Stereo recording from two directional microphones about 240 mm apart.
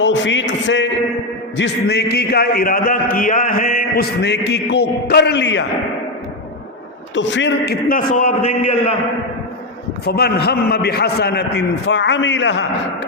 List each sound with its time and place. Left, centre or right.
0.0 s a man's voice: left
7.2 s a man's voice: left
10.1 s a man's voice: left